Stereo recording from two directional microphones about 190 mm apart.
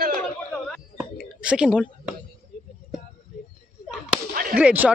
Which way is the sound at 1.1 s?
5° right (ahead or behind).